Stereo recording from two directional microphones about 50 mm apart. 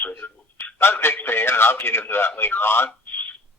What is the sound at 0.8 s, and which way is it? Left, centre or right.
Radio, left.